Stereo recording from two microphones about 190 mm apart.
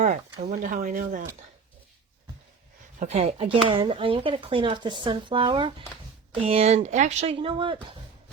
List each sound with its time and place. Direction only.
0.6 s speech: 45° right (ahead or behind)
3.0 s speech: 35° right (ahead or behind)